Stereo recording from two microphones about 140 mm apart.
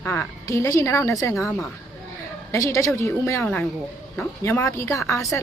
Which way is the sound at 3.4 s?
5° left (ahead or behind).